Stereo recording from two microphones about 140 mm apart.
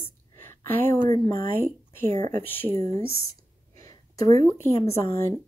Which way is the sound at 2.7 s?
45° right (ahead or behind).